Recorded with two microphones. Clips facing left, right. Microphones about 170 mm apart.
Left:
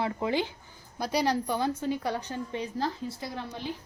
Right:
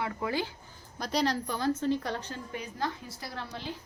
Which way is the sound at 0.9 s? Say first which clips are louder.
Left 2 dB; 5° left (ahead or behind).